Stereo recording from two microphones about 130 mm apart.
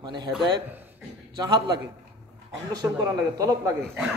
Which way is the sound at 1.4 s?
35° right (ahead or behind).